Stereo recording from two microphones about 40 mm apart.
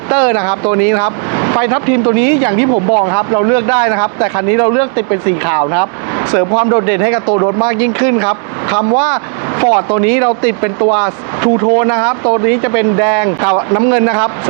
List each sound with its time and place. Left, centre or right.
0.1 s speech: centre
2.6 s speech: right
13.6 s speech: right
13.8 s speech: centre